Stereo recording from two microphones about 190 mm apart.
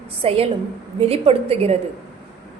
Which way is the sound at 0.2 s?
30° right (ahead or behind).